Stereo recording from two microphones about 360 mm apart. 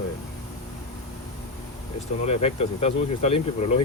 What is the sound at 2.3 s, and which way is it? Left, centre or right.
Speech, centre.